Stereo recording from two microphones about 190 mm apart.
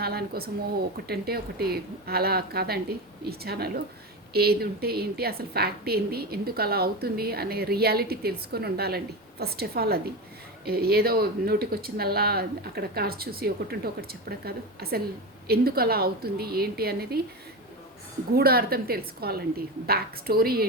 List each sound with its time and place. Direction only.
0.0 s a woman's voice: 55° right (ahead or behind)
18.3 s a woman's voice: 55° right (ahead or behind)